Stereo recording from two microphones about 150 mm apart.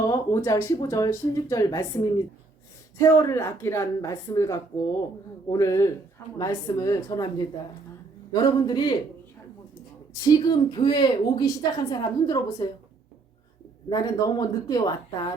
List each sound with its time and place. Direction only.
0.1 s a woman's voice: 20° left (ahead or behind)
10.2 s a woman's voice: 30° left (ahead or behind)
13.9 s a woman's voice: 25° left (ahead or behind)